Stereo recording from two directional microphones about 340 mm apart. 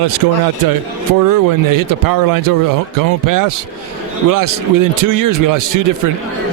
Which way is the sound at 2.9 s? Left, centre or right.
Right.